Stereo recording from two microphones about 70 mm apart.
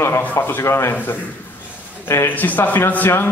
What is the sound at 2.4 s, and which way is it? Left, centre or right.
Speech, left.